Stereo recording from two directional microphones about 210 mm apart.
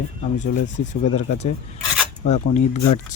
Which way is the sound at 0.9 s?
30° left (ahead or behind).